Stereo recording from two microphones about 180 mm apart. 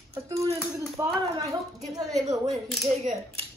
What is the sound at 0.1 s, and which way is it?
Clapping, 15° right (ahead or behind).